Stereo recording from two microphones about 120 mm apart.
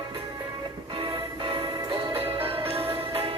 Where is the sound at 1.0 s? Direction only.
45° right (ahead or behind).